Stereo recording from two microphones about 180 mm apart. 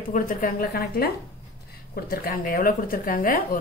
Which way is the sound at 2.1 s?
55° left (ahead or behind).